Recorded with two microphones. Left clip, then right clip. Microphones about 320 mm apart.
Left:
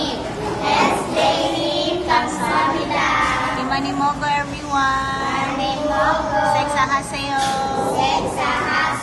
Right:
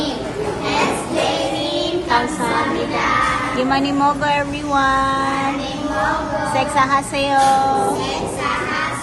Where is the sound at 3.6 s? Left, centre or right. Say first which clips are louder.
Right 3 dB; centre.